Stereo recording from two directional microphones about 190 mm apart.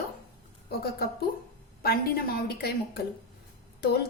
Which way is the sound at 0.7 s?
55° left (ahead or behind).